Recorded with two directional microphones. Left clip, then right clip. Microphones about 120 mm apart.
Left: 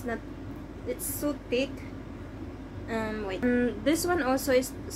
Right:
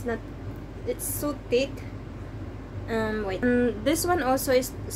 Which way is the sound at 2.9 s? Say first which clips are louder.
Right 4 dB; 25° right (ahead or behind).